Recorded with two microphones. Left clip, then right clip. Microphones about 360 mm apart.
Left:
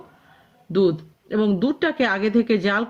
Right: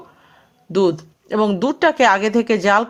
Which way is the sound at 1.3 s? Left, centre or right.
Centre.